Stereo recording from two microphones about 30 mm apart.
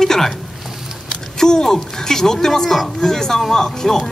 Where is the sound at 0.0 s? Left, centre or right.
Centre.